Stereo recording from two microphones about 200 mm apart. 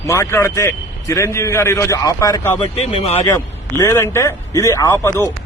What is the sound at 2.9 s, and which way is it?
Speech, 30° left (ahead or behind).